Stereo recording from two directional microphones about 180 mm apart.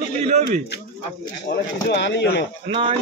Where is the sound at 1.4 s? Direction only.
65° left (ahead or behind).